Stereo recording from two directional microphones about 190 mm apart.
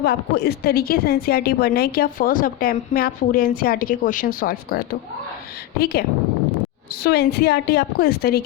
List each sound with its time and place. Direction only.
0.0 s a woman's voice: 55° left (ahead or behind)
5.8 s a woman's voice: 55° left (ahead or behind)